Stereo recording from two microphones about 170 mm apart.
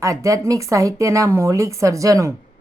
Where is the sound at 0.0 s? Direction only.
20° right (ahead or behind).